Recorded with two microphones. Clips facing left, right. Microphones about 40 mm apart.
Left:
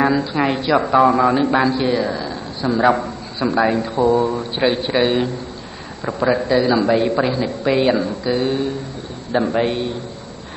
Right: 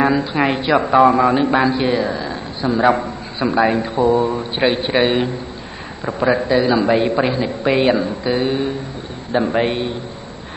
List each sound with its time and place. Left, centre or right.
0.0 s speech: centre